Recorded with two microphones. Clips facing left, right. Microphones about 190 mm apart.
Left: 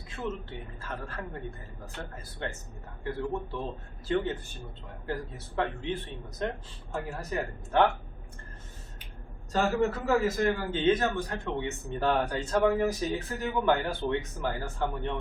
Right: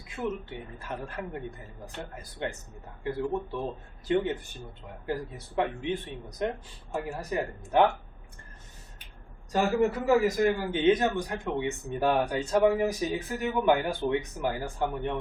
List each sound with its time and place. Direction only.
0.2 s a man's voice: 10° right (ahead or behind)
4.1 s a man's voice: 15° right (ahead or behind)
9.5 s a man's voice: 15° right (ahead or behind)